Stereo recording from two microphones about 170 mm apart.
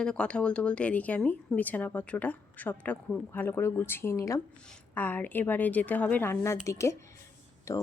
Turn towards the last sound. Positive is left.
turn(degrees=15)  # may be behind; listen again after turning